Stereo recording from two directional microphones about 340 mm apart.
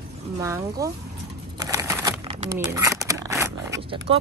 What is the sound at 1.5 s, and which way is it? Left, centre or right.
Crumpling, centre.